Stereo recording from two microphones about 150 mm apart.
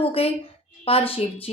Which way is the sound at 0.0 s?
40° left (ahead or behind).